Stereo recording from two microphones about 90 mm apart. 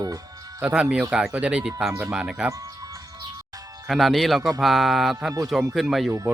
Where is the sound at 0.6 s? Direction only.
15° right (ahead or behind).